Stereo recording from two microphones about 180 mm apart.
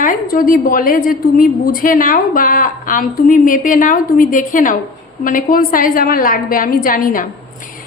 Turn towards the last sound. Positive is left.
turn(degrees=50)  # may be behind; listen again after turning